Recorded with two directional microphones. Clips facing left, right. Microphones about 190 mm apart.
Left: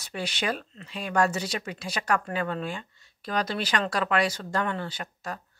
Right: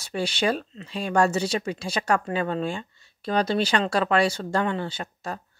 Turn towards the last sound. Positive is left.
turn(degrees=-25)  # may be behind; listen again after turning